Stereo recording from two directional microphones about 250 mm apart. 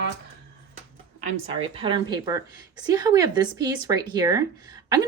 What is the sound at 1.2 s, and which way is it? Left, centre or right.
A woman's voice, right.